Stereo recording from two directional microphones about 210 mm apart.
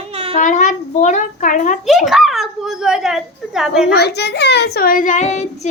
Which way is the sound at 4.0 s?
50° left (ahead or behind).